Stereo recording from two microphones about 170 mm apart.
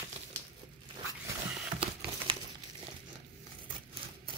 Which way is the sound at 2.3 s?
30° right (ahead or behind).